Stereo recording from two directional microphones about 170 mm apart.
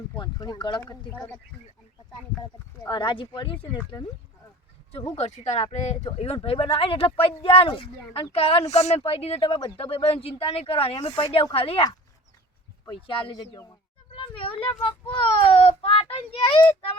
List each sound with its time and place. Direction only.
0.2 s speech: 25° left (ahead or behind)
1.1 s speech: 10° left (ahead or behind)
2.4 s speech: 25° left (ahead or behind)
5.1 s speech: 40° left (ahead or behind)
12.9 s speech: 30° left (ahead or behind)